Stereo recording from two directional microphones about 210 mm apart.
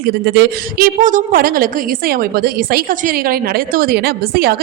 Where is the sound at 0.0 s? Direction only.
50° right (ahead or behind).